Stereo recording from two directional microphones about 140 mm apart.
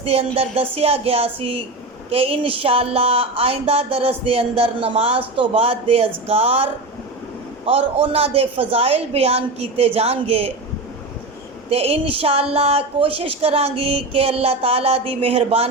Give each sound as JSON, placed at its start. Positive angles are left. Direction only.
{"t": 0.0, "sound": "music", "side_deg": -45}
{"t": 0.3, "sound": "a woman's voice", "side_deg": -45}
{"t": 11.7, "sound": "a woman's voice", "side_deg": -45}